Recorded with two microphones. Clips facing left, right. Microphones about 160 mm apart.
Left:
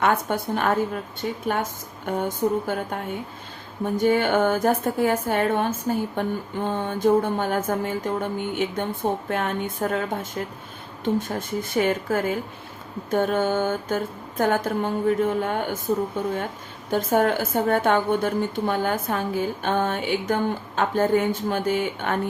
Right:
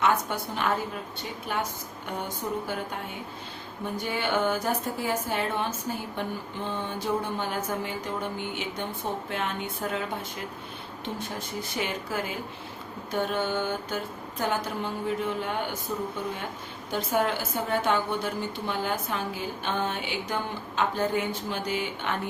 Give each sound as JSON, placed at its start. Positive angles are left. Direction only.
{"t": 0.0, "sound": "a woman's voice", "side_deg": 55}
{"t": 3.9, "sound": "a woman's voice", "side_deg": 50}
{"t": 16.9, "sound": "a woman's voice", "side_deg": 50}